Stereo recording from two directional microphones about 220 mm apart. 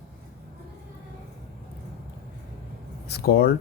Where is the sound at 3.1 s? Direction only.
45° left (ahead or behind).